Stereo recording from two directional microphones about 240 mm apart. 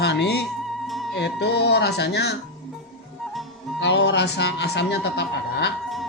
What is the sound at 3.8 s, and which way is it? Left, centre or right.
Speech, left.